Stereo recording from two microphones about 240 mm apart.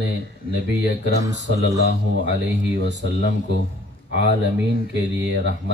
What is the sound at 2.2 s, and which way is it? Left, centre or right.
Speech, right.